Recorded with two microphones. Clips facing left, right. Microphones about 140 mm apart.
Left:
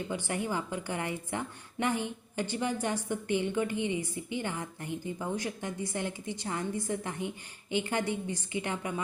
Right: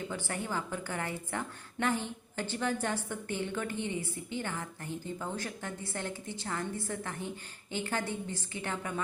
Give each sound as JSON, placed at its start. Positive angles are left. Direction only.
{"t": 0.1, "sound": "a woman's voice", "side_deg": 15}